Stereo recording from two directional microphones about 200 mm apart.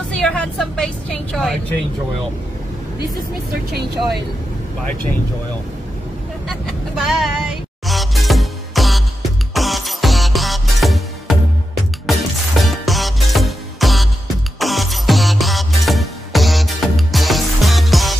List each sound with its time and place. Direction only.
0.1 s a woman's voice: 5° left (ahead or behind)
6.5 s music: centre (ahead or behind)